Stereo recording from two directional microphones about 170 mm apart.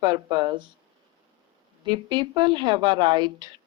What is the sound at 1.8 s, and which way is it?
Speech, 25° right (ahead or behind).